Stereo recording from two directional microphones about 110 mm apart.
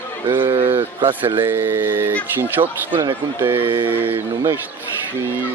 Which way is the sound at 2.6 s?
45° right (ahead or behind).